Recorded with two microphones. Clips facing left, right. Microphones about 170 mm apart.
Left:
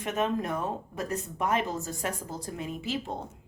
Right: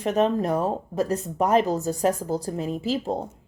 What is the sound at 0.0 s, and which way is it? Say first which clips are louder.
Speech: right 7 dB; 35° right (ahead or behind).